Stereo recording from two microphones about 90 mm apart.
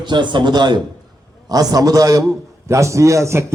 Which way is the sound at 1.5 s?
45° right (ahead or behind).